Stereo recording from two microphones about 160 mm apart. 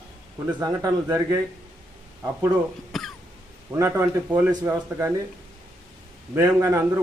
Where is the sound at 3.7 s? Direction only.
20° right (ahead or behind).